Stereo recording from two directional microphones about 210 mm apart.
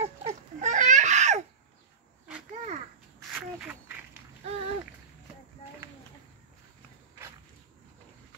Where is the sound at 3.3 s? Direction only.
10° right (ahead or behind).